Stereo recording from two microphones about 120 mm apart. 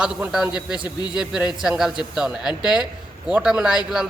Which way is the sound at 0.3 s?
5° right (ahead or behind).